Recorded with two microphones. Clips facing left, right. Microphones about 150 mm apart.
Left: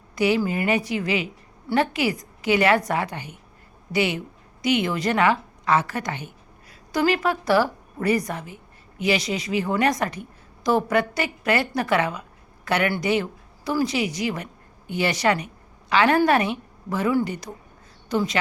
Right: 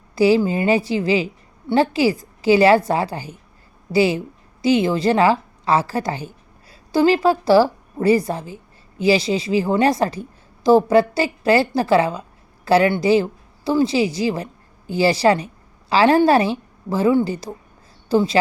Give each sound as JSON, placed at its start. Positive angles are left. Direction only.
{"t": 0.2, "sound": "a woman's voice", "side_deg": -30}